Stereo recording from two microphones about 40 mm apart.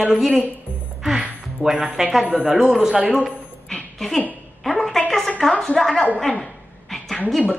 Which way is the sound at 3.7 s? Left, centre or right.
Centre.